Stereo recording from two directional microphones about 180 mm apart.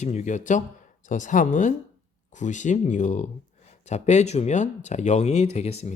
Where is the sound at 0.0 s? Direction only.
40° left (ahead or behind).